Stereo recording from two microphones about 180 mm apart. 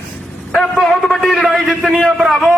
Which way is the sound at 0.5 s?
Centre (ahead or behind).